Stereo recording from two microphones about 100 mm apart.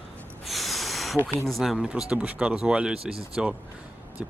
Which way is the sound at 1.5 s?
Centre (ahead or behind).